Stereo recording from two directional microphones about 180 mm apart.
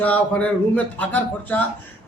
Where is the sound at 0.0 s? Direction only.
10° left (ahead or behind).